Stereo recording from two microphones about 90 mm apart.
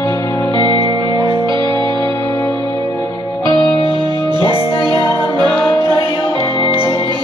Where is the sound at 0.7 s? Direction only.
60° right (ahead or behind).